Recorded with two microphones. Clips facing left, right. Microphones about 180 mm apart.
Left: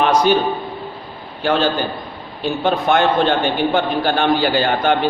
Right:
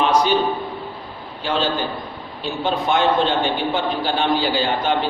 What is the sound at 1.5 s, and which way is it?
A man's voice, 55° left (ahead or behind).